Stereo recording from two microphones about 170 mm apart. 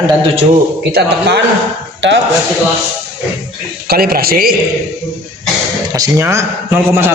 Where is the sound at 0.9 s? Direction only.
70° right (ahead or behind).